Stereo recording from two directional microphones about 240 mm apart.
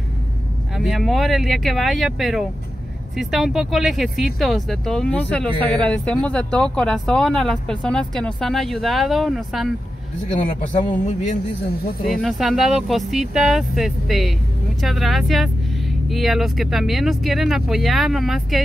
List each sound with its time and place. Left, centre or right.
0.7 s speech: centre
10.4 s a man's voice: left
12.1 s speech: centre